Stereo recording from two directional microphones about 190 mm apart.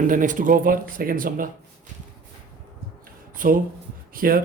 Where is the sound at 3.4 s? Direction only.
45° right (ahead or behind).